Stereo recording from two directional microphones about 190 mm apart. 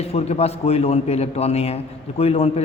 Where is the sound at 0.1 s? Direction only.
35° left (ahead or behind).